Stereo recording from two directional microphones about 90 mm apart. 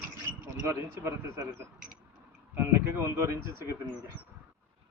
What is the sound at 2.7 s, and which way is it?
Speech, 30° right (ahead or behind).